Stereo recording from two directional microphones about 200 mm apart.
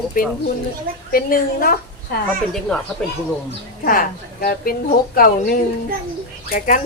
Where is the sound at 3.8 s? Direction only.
45° left (ahead or behind).